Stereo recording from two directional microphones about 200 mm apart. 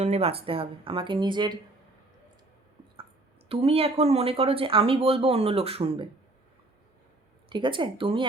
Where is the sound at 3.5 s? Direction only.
30° right (ahead or behind).